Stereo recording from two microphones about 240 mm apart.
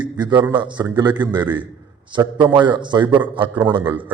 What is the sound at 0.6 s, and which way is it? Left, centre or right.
A man's voice, centre.